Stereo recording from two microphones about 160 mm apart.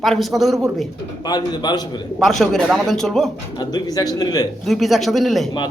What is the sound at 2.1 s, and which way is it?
A man's voice, centre (ahead or behind).